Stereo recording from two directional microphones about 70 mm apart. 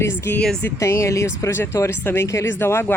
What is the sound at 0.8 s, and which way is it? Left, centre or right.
Speech, left.